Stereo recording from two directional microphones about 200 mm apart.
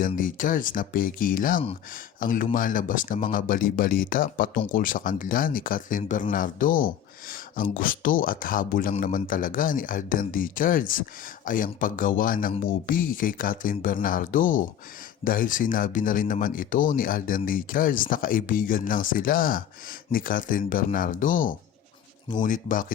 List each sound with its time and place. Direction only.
0.0 s speech: 40° left (ahead or behind)